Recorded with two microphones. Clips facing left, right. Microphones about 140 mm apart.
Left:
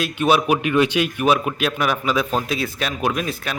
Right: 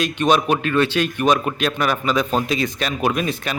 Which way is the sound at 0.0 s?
5° left (ahead or behind).